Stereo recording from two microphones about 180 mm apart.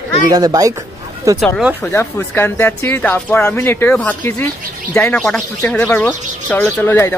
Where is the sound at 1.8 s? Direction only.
10° left (ahead or behind).